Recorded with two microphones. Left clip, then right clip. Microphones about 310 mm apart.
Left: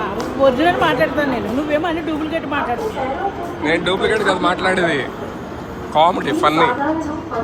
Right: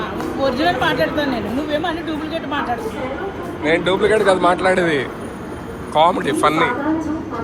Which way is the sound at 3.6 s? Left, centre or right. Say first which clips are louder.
Right 1 dB; centre.